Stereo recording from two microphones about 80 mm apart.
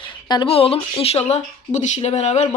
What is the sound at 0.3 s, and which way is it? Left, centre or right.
Speech, left.